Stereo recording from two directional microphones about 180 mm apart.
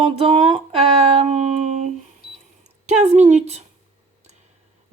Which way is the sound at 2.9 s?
40° right (ahead or behind).